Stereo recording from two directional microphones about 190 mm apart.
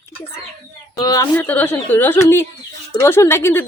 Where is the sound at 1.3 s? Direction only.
10° left (ahead or behind).